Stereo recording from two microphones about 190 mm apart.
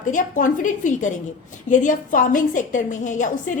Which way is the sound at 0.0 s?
40° left (ahead or behind).